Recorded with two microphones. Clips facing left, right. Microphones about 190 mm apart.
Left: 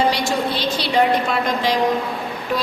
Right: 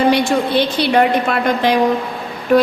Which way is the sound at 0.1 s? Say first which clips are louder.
Right 6 dB; 60° right (ahead or behind).